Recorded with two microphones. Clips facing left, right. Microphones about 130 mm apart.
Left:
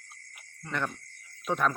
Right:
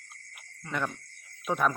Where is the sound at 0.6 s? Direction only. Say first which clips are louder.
Right 1 dB; 5° right (ahead or behind).